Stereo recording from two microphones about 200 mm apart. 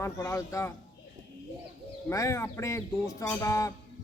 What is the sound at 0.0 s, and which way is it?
Speech, 15° left (ahead or behind).